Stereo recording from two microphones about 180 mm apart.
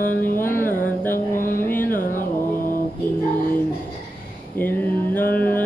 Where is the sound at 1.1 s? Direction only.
50° left (ahead or behind).